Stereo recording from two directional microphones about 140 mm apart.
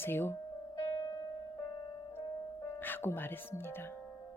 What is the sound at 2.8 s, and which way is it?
Speech, 15° left (ahead or behind).